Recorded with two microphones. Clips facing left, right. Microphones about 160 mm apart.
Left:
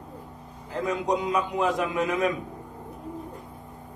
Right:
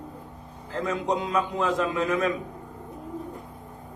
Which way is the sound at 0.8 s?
15° left (ahead or behind).